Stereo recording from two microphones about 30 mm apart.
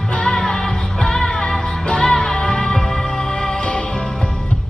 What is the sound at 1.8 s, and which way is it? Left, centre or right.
Music, left.